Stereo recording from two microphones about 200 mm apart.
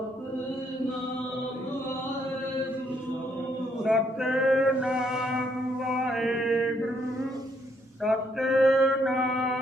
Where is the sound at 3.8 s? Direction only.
Centre (ahead or behind).